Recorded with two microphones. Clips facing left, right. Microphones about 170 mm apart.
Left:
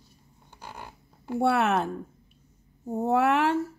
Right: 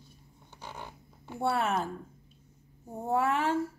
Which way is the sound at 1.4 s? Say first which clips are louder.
Left 6 dB; 70° left (ahead or behind).